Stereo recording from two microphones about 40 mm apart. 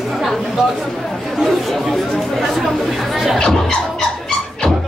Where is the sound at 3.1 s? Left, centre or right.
Centre.